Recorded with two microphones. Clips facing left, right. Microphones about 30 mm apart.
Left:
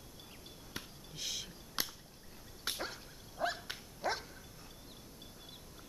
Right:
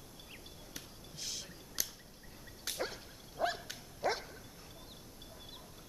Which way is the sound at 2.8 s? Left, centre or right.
Centre.